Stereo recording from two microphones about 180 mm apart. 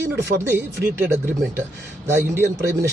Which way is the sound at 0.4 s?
10° right (ahead or behind).